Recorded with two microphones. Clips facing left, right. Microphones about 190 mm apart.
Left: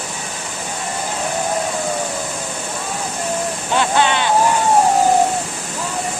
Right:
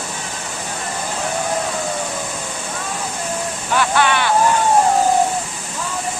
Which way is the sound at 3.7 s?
20° left (ahead or behind).